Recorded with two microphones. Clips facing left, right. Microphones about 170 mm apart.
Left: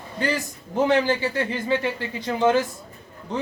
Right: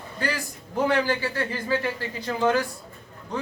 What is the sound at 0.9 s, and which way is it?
A man's voice, 20° left (ahead or behind).